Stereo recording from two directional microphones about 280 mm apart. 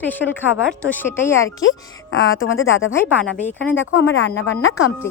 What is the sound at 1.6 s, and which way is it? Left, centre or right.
A woman's voice, left.